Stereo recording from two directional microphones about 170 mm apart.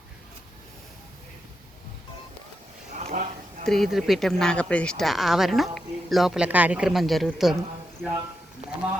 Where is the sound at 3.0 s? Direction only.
40° right (ahead or behind).